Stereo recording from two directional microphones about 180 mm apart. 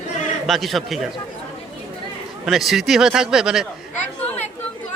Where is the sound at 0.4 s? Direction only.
Centre (ahead or behind).